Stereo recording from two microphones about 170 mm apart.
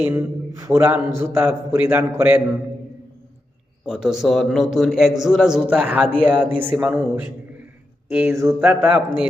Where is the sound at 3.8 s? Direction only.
5° right (ahead or behind).